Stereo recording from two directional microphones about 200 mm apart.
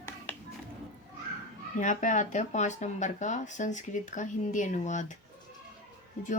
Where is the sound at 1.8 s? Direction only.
40° left (ahead or behind).